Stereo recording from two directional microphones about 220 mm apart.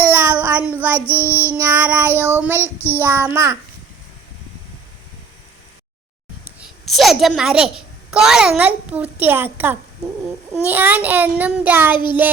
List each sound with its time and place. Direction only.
0.1 s child singing: 10° right (ahead or behind)
0.9 s child singing: 10° left (ahead or behind)
1.6 s child singing: 10° right (ahead or behind)
2.6 s child singing: 10° left (ahead or behind)
3.0 s child singing: 10° right (ahead or behind)
6.4 s a child's voice: centre (ahead or behind)
10.7 s child singing: 10° right (ahead or behind)